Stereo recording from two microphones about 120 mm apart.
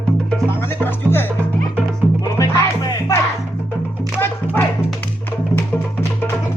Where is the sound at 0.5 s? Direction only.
20° left (ahead or behind).